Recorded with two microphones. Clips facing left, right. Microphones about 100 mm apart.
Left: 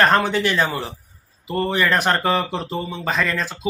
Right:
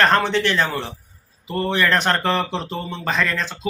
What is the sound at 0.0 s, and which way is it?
Speech, 10° left (ahead or behind).